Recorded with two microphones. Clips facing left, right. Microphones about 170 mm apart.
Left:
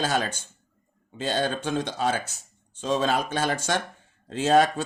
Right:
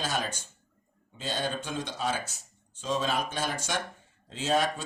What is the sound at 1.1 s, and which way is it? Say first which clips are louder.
Speech: left 6 dB; 65° left (ahead or behind).